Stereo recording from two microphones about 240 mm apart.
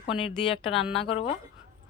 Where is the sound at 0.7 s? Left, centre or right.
Centre.